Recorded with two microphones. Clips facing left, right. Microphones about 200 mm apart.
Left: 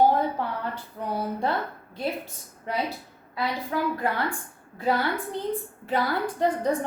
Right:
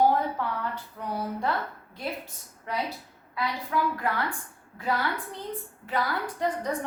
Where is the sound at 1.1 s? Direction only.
30° left (ahead or behind).